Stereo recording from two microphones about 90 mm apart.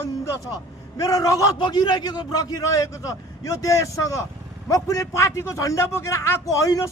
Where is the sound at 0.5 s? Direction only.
40° left (ahead or behind).